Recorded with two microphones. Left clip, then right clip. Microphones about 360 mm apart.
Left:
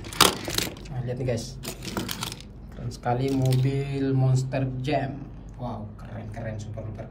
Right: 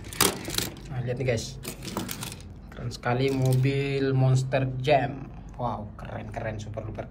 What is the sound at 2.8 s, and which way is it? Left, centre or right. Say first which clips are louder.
Speech: even; centre.